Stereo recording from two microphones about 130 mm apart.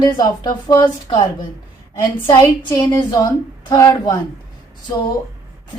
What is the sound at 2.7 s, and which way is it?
Speech, 20° left (ahead or behind).